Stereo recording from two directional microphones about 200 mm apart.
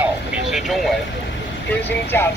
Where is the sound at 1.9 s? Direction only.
10° left (ahead or behind).